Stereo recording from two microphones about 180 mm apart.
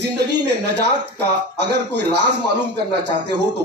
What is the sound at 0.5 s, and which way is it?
Speech, 70° right (ahead or behind).